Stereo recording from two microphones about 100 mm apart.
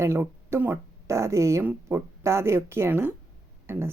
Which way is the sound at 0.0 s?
25° right (ahead or behind).